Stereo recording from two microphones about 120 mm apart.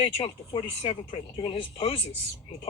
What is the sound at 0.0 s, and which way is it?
Speech, 50° left (ahead or behind).